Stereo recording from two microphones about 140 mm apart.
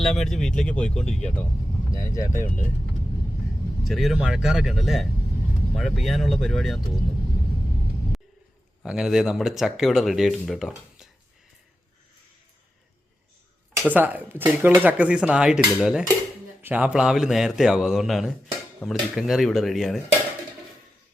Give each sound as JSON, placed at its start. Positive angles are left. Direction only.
{"t": 0.0, "sound": "speech", "side_deg": 0}
{"t": 1.9, "sound": "speech", "side_deg": 25}
{"t": 3.8, "sound": "speech", "side_deg": 0}
{"t": 8.8, "sound": "speech", "side_deg": -5}
{"t": 13.9, "sound": "speech", "side_deg": -10}